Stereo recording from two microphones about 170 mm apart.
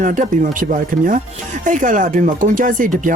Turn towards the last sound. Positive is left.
turn(degrees=-50)  # may be behind; listen again after turning